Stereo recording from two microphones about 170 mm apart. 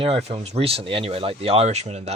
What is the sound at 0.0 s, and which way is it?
Speech, 35° right (ahead or behind).